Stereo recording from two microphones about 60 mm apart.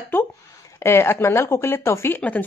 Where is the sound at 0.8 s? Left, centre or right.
Left.